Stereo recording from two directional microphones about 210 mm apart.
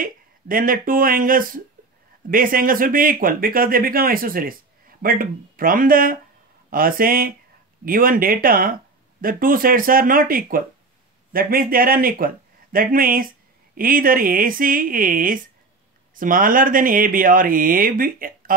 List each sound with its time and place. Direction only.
0.0 s speech: 40° right (ahead or behind)